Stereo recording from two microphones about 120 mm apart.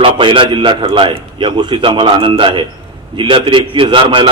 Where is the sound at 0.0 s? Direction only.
45° right (ahead or behind).